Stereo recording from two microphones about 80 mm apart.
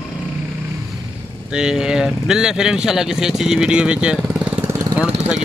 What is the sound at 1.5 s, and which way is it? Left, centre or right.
Speech, centre.